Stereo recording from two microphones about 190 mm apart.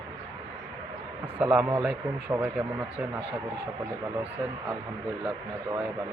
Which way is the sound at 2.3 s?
5° right (ahead or behind).